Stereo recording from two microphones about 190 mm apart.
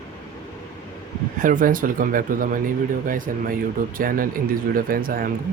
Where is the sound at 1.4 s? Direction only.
45° right (ahead or behind).